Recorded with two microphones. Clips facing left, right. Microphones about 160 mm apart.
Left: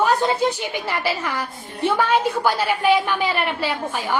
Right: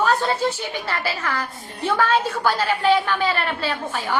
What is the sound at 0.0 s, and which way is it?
A woman's voice, 15° left (ahead or behind).